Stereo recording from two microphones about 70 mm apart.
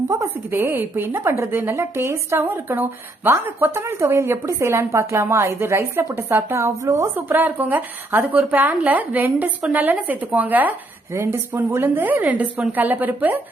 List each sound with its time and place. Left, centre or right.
0.1 s a woman's voice: right
2.4 s a woman's voice: right
3.8 s a woman's voice: right
7.2 s a woman's voice: right
11.1 s a woman's voice: right